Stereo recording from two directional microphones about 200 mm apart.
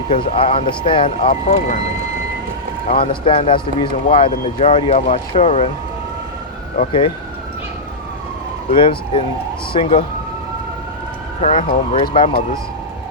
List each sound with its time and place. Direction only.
0.1 s speech: 30° left (ahead or behind)
1.3 s speech: 40° left (ahead or behind)
2.8 s speech: 30° left (ahead or behind)
6.7 s speech: 25° left (ahead or behind)
8.7 s speech: 25° left (ahead or behind)
11.3 s speech: 35° left (ahead or behind)